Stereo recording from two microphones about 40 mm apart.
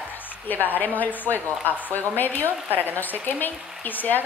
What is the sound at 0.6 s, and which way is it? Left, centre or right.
A woman's voice, left.